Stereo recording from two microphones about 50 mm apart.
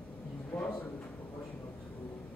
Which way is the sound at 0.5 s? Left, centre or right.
Centre.